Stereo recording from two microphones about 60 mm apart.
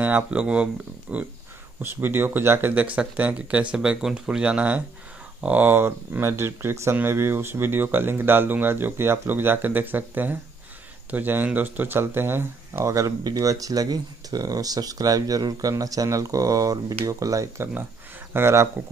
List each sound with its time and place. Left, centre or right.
0.0 s speech: right
1.8 s speech: right
2.7 s speech: right
12.0 s speech: right
12.8 s speech: right
18.3 s speech: right